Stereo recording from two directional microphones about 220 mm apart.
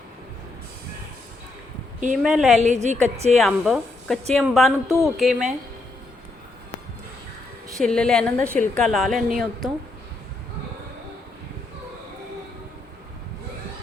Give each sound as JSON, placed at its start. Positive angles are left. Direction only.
{"t": 2.2, "sound": "speech", "side_deg": 0}
{"t": 2.6, "sound": "a woman's voice", "side_deg": -30}
{"t": 3.4, "sound": "speech", "side_deg": 0}
{"t": 7.8, "sound": "speech", "side_deg": 5}